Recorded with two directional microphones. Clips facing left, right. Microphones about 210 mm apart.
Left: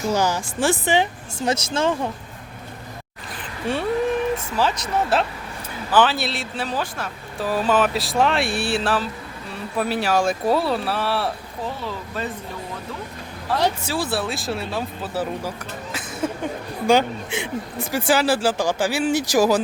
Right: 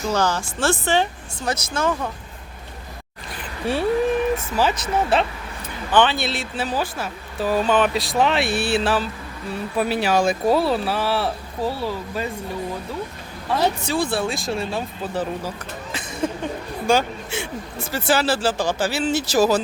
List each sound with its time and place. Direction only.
0.1 s speech: 15° left (ahead or behind)
4.5 s speech: 5° right (ahead or behind)
13.5 s speech: 5° left (ahead or behind)
16.8 s speech: 15° left (ahead or behind)